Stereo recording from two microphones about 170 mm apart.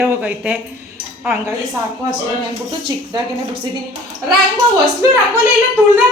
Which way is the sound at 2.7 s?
25° right (ahead or behind).